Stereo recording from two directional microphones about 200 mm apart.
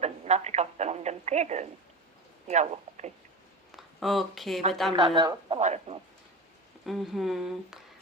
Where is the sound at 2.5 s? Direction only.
35° right (ahead or behind).